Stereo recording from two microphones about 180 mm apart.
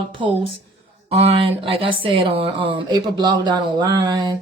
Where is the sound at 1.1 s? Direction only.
30° right (ahead or behind).